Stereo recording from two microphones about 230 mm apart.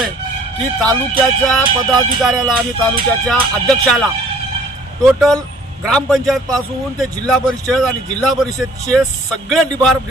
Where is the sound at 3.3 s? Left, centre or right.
Centre.